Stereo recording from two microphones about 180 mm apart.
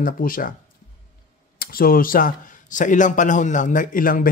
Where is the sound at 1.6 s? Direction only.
55° left (ahead or behind).